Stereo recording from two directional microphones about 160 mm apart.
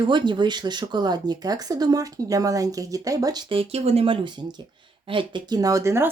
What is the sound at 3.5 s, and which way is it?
Speech, 35° right (ahead or behind).